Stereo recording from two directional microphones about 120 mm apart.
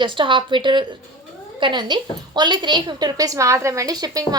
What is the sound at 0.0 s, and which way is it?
A woman's voice, 40° right (ahead or behind).